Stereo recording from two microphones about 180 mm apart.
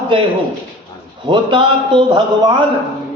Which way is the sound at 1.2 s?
25° right (ahead or behind).